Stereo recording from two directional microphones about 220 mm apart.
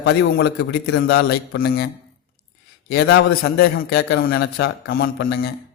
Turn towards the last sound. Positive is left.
turn(degrees=45)  # may be behind; listen again after turning